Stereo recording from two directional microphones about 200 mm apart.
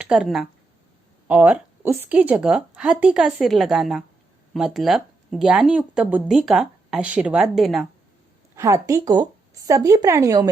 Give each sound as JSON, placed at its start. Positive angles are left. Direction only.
{"t": 0.0, "sound": "a woman's voice", "side_deg": -5}
{"t": 8.5, "sound": "speech", "side_deg": -15}